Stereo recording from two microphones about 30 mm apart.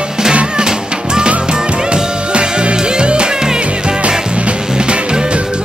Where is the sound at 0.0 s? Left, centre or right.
Right.